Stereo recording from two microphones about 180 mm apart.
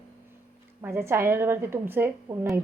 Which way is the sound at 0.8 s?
15° right (ahead or behind).